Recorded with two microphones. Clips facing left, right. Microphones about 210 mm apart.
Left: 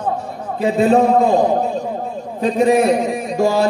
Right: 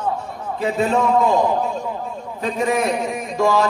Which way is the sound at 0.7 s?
35° left (ahead or behind).